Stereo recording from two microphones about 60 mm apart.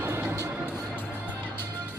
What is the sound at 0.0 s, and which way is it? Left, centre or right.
Music, right.